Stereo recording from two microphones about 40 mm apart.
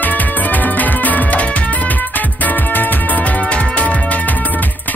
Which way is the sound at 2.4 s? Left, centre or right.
Left.